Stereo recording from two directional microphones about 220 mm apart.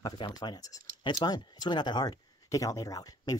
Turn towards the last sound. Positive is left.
turn(degrees=15)  # may be behind; listen again after turning